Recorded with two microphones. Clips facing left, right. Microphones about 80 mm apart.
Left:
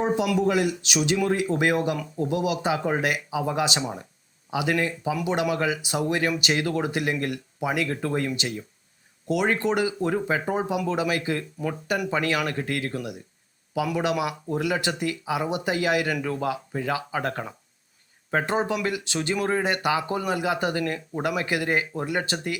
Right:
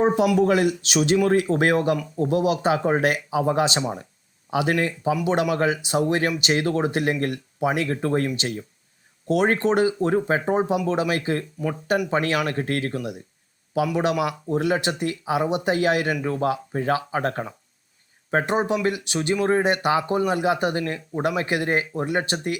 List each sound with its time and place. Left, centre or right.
0.3 s a man's voice: right
10.4 s speech: right